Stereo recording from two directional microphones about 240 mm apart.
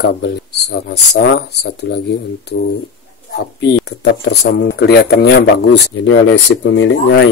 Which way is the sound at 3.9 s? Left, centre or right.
Left.